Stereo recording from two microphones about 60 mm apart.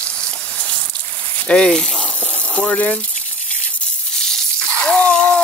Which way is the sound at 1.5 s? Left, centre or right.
Centre.